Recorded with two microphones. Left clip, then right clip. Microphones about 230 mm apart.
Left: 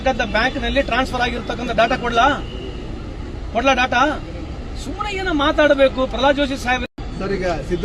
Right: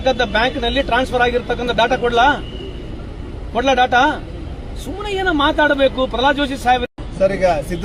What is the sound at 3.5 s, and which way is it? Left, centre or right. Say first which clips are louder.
Speech: right 2 dB; centre.